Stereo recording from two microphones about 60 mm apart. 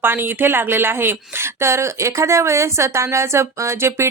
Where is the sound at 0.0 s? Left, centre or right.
Right.